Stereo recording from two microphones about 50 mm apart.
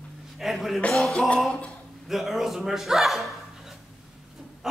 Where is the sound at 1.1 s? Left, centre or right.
Left.